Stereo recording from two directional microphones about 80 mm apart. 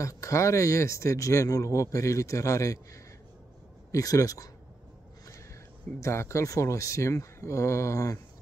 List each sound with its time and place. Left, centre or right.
0.0 s speech: left
5.9 s speech: left